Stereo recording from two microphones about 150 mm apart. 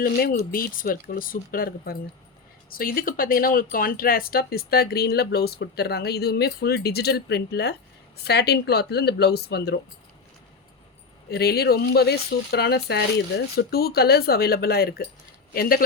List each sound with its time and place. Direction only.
0.0 s speech: 75° left (ahead or behind); by 9.7 s 90° left
11.3 s speech: 90° left